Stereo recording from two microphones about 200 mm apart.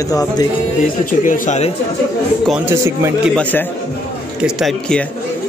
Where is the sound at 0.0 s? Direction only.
20° left (ahead or behind).